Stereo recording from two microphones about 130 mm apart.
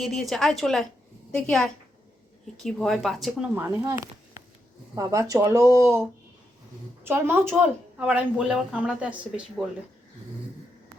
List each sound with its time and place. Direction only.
0.0 s a woman's voice: centre (ahead or behind)
3.5 s a woman's voice: 20° right (ahead or behind)
8.0 s speech: 5° right (ahead or behind)